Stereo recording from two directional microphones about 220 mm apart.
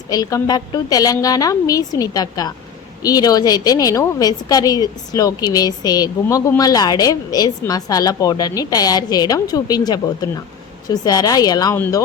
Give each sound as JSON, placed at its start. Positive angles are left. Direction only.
{"t": 0.1, "sound": "a woman's voice", "side_deg": 15}